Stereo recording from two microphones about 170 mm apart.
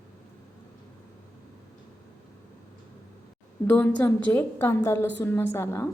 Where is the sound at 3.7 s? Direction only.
10° left (ahead or behind).